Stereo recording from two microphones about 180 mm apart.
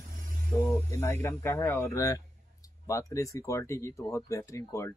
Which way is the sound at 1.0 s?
15° left (ahead or behind).